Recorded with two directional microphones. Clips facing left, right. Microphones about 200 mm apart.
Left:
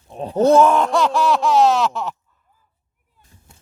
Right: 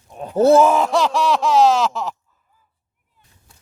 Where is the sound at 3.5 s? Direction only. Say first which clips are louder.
Left 3 dB; 25° left (ahead or behind).